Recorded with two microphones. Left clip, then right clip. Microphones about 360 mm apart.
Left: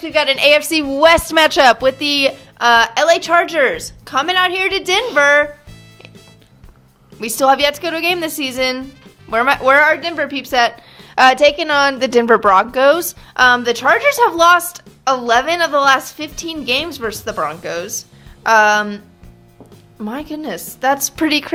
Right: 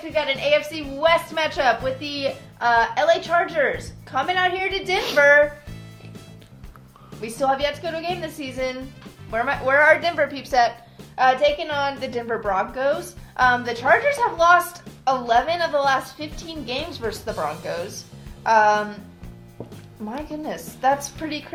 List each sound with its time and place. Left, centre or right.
0.1 s a woman's voice: left
7.2 s a woman's voice: left
11.1 s a woman's voice: left
20.1 s a woman's voice: left